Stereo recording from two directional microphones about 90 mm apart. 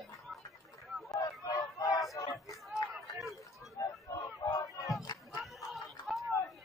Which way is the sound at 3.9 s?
40° left (ahead or behind).